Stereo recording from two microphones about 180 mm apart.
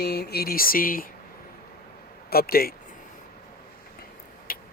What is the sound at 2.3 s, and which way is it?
Speech, 55° left (ahead or behind).